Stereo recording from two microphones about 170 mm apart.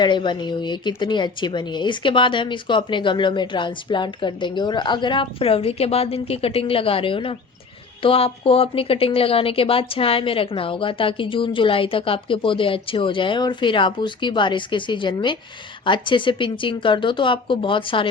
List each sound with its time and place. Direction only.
0.0 s a woman's voice: 30° left (ahead or behind)